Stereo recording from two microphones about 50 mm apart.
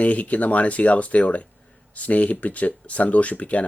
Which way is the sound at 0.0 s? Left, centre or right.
Left.